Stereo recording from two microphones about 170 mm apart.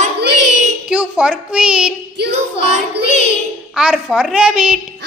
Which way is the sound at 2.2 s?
80° right.